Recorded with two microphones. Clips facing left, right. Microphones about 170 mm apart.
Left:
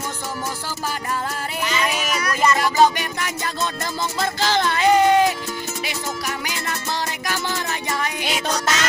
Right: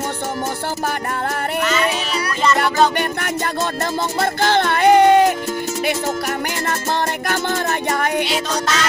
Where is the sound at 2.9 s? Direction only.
60° right (ahead or behind).